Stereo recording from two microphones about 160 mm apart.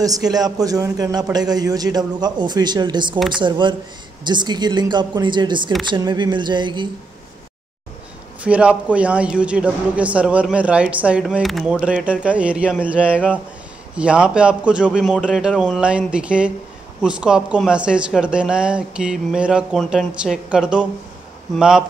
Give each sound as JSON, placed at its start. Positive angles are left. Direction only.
{"t": 0.0, "sound": "a man's voice", "side_deg": -25}
{"t": 8.5, "sound": "a man's voice", "side_deg": -10}